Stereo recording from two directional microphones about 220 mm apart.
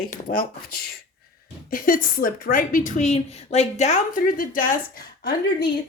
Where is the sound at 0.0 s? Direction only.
40° left (ahead or behind).